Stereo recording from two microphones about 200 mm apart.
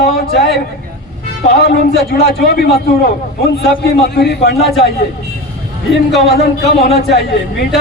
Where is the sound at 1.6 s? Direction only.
55° left (ahead or behind).